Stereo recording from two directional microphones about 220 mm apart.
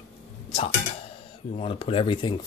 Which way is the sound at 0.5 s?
25° left (ahead or behind).